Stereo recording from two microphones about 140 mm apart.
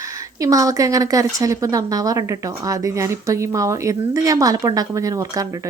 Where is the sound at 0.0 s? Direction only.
25° right (ahead or behind).